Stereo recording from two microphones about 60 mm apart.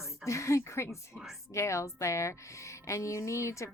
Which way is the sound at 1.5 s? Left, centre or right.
Left.